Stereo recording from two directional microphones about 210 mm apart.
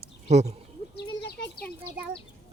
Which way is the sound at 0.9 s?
50° left (ahead or behind).